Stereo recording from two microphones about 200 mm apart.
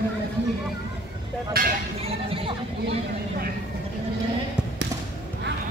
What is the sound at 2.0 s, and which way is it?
Chatter, 30° right (ahead or behind).